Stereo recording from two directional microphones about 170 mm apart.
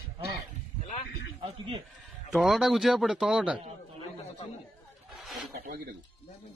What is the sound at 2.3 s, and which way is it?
Pigeon, centre (ahead or behind).